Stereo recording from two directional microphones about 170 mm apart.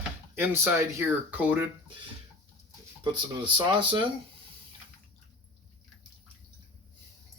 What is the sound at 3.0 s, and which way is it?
Speech, 30° right (ahead or behind).